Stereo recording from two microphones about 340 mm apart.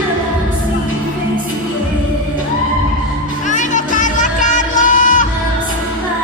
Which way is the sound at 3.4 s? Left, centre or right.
Left.